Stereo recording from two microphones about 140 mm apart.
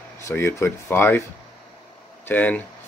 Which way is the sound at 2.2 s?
10° left (ahead or behind).